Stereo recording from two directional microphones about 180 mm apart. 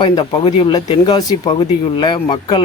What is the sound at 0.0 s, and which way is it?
Speech, 25° left (ahead or behind).